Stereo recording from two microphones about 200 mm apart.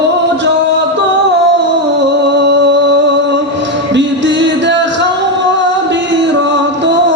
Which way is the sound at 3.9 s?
65° right (ahead or behind).